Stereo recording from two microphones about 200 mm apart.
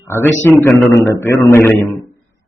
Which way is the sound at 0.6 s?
15° left (ahead or behind).